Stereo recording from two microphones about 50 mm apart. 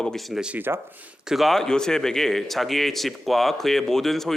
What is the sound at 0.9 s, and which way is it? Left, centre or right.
Speech, right.